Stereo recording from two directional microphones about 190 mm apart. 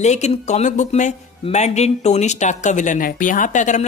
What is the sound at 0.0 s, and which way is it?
Speech, 35° left (ahead or behind).